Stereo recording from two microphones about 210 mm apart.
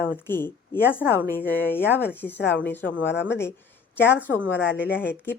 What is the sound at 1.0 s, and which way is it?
Speech, 10° right (ahead or behind).